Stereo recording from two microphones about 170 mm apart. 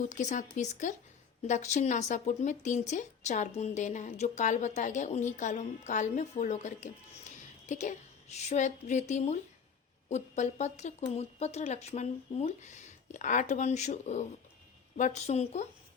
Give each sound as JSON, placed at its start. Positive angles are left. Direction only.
{"t": 0.0, "sound": "a woman's voice", "side_deg": 45}